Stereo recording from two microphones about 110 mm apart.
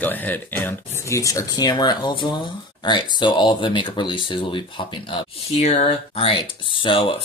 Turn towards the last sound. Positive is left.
turn(degrees=50)  # may be behind; listen again after turning